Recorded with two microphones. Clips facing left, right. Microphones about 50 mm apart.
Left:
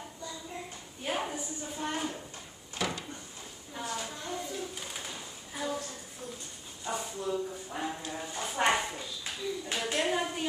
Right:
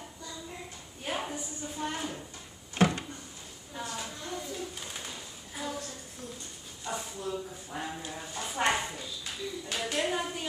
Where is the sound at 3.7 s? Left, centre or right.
Centre.